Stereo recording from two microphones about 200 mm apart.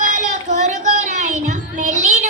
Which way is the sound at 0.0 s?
40° right (ahead or behind).